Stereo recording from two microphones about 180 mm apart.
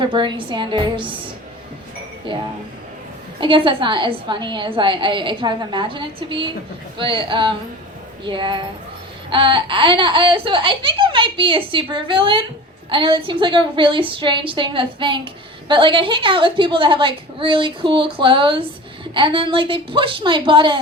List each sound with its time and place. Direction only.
0.0 s speech: 25° right (ahead or behind)
3.4 s speech: 30° right (ahead or behind)